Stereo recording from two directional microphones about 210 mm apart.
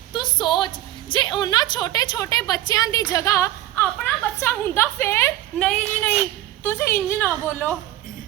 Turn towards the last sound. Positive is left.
turn(degrees=10)  # may be behind; listen again after turning